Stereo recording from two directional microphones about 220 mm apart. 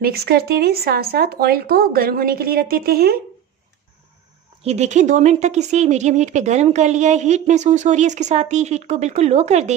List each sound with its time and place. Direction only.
0.0 s speech: 45° right (ahead or behind)
4.6 s speech: 30° right (ahead or behind)